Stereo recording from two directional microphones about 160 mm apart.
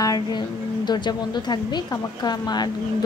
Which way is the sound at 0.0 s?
20° left (ahead or behind).